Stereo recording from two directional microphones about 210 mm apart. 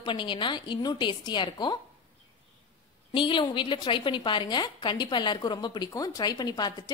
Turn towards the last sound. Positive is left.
turn(degrees=20)  # may be behind; listen again after turning